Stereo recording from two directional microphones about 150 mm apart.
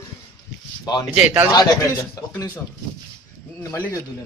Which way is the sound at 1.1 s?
10° right (ahead or behind).